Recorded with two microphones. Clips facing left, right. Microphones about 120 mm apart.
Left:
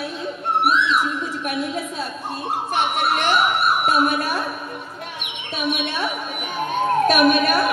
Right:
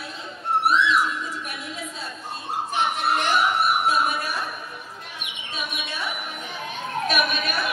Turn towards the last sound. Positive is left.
turn(degrees=50)  # may be behind; listen again after turning